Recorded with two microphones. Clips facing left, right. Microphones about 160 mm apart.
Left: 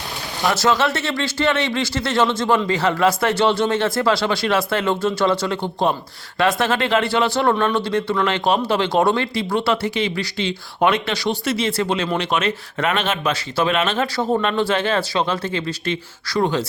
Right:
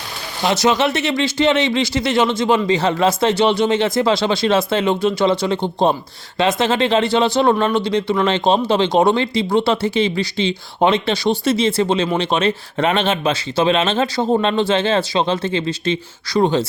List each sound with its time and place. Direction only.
0.4 s speech: 20° right (ahead or behind)